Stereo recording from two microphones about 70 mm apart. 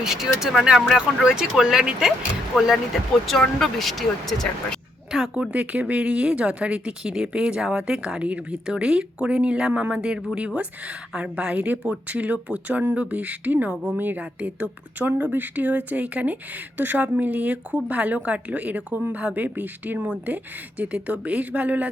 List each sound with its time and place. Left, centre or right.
0.0 s speech: centre
5.2 s speech: centre